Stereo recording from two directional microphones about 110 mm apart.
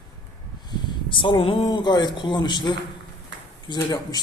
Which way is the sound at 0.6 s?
45° left (ahead or behind).